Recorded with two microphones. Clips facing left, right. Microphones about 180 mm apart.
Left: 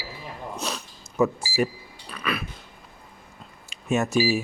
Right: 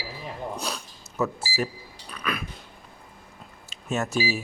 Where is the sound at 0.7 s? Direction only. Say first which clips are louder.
Left 1 dB; 5° left (ahead or behind).